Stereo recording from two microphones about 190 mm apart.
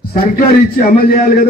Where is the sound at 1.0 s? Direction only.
50° left (ahead or behind).